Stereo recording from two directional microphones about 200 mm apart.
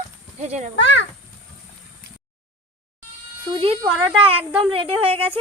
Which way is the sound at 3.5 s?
25° right (ahead or behind).